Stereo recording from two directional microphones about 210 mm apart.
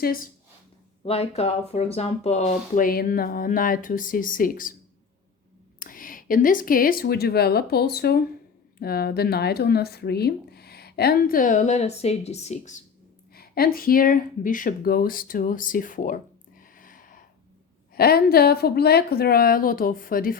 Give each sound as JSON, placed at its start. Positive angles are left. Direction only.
{"t": 0.0, "sound": "speech", "side_deg": 45}
{"t": 1.0, "sound": "speech", "side_deg": 30}
{"t": 5.8, "sound": "speech", "side_deg": 40}
{"t": 13.3, "sound": "speech", "side_deg": 45}